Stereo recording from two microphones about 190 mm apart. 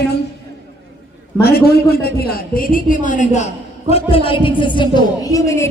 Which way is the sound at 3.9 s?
30° left (ahead or behind).